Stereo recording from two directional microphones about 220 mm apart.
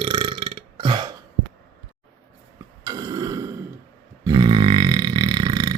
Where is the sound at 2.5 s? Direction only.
15° right (ahead or behind).